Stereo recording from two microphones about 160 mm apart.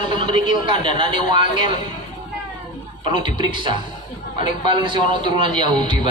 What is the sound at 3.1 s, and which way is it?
A man's voice, 30° right (ahead or behind).